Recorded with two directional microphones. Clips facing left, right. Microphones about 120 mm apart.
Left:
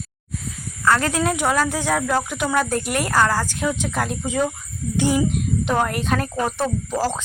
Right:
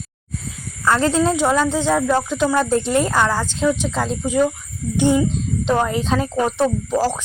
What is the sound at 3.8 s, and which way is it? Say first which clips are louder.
Speech: right 3 dB; 20° right (ahead or behind).